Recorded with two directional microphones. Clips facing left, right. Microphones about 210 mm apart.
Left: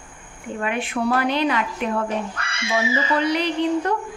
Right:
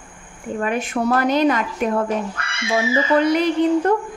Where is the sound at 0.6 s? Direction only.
40° right (ahead or behind).